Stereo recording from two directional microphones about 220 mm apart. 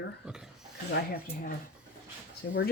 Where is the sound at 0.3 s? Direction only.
5° right (ahead or behind).